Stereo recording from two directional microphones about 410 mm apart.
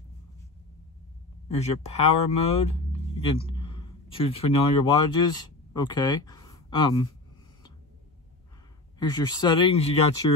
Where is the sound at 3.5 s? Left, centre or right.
Centre.